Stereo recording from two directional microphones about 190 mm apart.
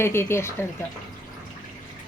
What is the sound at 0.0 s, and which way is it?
Speech, 15° left (ahead or behind).